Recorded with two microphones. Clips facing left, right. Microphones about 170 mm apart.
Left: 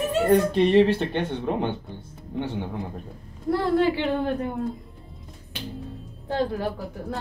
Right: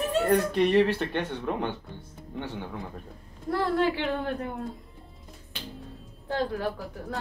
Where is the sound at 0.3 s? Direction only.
25° left (ahead or behind).